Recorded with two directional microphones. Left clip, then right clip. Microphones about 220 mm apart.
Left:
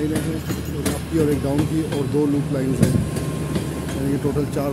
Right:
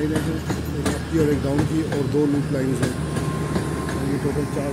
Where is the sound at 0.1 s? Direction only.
45° left (ahead or behind).